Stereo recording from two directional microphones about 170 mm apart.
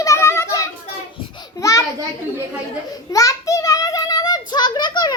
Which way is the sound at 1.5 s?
20° left (ahead or behind).